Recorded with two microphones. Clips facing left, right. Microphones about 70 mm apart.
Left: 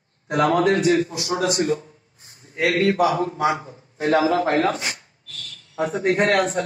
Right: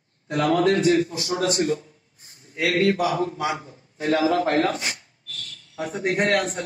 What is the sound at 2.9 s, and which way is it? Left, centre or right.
A man's voice, left.